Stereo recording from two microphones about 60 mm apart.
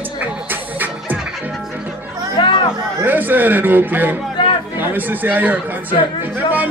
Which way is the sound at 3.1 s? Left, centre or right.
Right.